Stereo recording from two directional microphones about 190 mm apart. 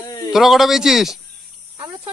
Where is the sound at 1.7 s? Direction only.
30° right (ahead or behind).